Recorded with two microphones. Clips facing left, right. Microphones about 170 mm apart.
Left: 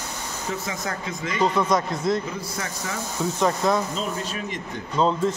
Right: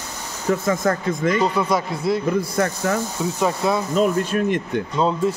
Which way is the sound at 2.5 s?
55° right (ahead or behind).